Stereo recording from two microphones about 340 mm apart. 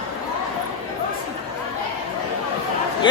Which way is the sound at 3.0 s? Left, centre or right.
Centre.